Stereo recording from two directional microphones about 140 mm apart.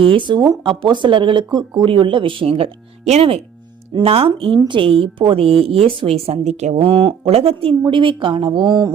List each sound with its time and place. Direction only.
0.0 s a woman's voice: 35° right (ahead or behind)